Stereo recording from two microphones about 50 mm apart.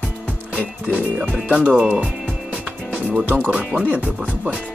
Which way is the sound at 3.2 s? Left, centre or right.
Right.